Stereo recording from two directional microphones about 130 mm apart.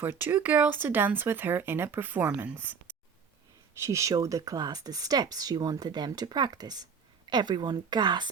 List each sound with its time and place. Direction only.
0.0 s speech: 15° right (ahead or behind)
3.8 s a woman's voice: 20° right (ahead or behind)